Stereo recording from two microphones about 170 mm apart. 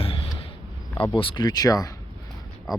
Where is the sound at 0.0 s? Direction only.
35° left (ahead or behind).